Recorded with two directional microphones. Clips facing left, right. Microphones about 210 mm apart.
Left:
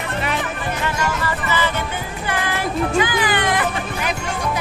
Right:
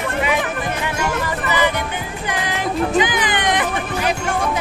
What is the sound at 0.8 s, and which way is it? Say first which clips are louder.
Music: left 1 dB; 15° right (ahead or behind).